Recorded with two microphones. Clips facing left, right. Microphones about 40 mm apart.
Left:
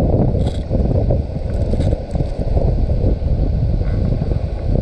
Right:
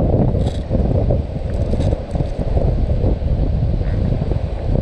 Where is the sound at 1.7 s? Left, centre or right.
Right.